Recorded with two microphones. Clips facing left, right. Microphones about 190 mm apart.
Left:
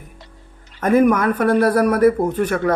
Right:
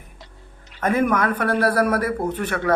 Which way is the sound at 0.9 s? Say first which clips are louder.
Left 5 dB; 45° left (ahead or behind).